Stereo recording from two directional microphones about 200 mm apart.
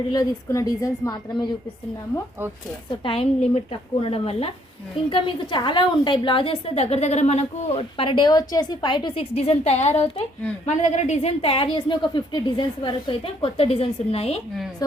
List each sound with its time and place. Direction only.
0.1 s a woman's voice: 15° left (ahead or behind)
3.0 s a woman's voice: 30° left (ahead or behind)
14.8 s a woman's voice: 20° left (ahead or behind)